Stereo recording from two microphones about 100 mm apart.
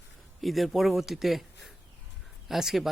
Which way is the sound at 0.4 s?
Centre (ahead or behind).